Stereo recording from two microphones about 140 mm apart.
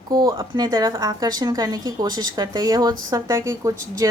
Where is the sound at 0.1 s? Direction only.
25° right (ahead or behind).